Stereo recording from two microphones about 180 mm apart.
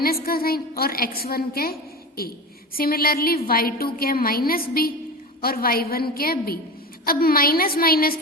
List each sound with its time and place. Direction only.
0.0 s a woman's voice: 55° left (ahead or behind)
2.7 s a woman's voice: 55° left (ahead or behind)